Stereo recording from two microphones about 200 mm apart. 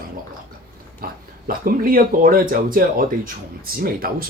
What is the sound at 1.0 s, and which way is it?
Speech, 45° right (ahead or behind).